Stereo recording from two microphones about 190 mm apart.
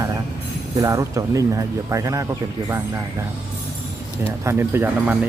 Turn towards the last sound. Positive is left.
turn(degrees=-10)  # may be behind; listen again after turning